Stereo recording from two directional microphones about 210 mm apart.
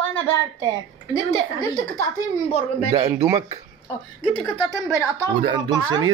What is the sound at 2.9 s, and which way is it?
Speech, 20° right (ahead or behind).